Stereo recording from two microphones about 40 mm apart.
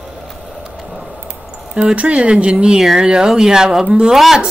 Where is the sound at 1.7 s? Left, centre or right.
Right.